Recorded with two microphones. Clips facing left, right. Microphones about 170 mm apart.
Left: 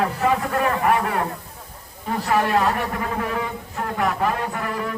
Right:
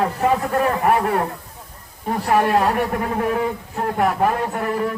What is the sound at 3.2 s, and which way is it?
A man's voice, 40° right (ahead or behind).